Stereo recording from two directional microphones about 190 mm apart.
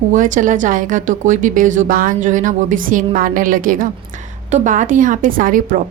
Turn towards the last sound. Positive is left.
turn(degrees=-45)  # may be behind; listen again after turning